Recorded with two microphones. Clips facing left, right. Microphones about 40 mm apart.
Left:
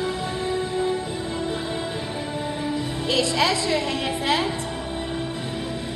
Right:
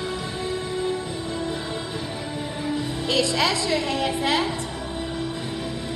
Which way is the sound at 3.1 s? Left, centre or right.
Left.